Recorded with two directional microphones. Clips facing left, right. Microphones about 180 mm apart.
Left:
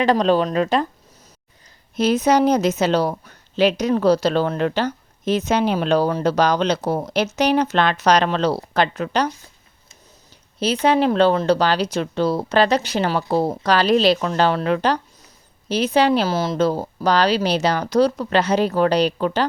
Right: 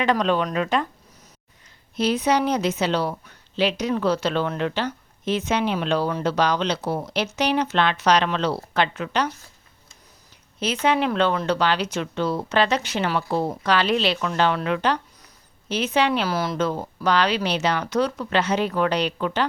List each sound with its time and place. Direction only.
0.0 s a woman's voice: 35° left (ahead or behind)
2.0 s a woman's voice: 45° left (ahead or behind)
10.8 s a woman's voice: 35° left (ahead or behind)